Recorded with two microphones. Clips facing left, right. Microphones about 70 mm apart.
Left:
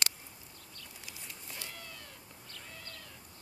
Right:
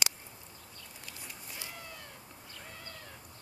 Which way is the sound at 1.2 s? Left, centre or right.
Centre.